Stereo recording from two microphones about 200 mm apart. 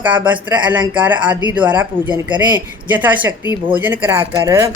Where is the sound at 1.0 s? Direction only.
10° right (ahead or behind).